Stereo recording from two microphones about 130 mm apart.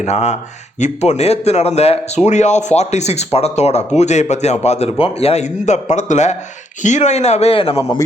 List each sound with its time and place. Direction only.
0.0 s a man's voice: 60° left (ahead or behind)